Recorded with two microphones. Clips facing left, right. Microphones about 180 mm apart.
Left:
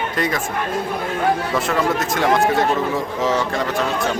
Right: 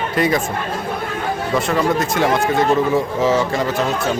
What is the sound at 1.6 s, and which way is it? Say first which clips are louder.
A man's voice: right 2 dB; centre (ahead or behind).